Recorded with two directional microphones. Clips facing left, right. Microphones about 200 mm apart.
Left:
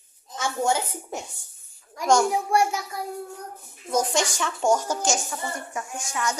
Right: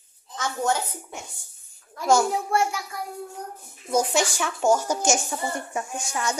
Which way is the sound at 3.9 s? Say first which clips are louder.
Right 1 dB; 10° right (ahead or behind).